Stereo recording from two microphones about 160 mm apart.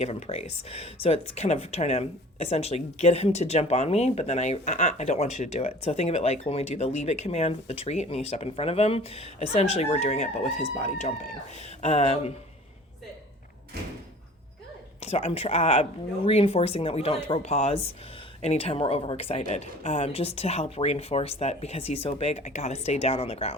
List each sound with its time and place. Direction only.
0.0 s speech: 40° left (ahead or behind)
15.0 s speech: 40° left (ahead or behind)